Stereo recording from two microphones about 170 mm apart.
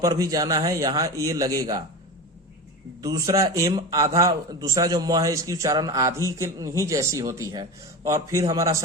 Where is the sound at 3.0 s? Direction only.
20° right (ahead or behind).